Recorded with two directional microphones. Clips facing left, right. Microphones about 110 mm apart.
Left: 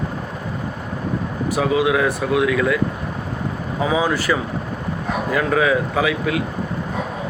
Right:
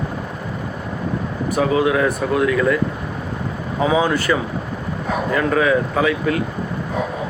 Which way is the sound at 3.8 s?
5° left (ahead or behind).